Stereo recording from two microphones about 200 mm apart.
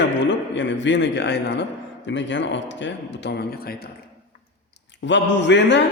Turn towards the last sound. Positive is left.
turn(degrees=60)  # may be behind; listen again after turning